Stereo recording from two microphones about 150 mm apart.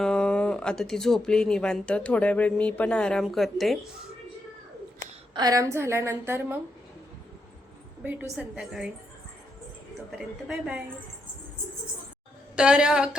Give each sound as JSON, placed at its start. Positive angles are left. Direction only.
{"t": 0.0, "sound": "speech", "side_deg": 5}
{"t": 5.3, "sound": "a woman's voice", "side_deg": -25}
{"t": 8.0, "sound": "a woman's voice", "side_deg": -10}
{"t": 10.1, "sound": "speech", "side_deg": 0}
{"t": 12.5, "sound": "speech", "side_deg": -5}